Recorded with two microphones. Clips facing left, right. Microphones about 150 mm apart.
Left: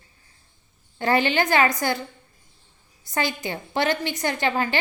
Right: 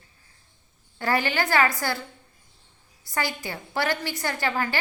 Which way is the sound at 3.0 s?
20° left (ahead or behind).